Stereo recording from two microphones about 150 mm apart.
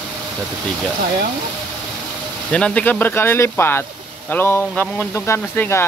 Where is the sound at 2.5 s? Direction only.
5° left (ahead or behind).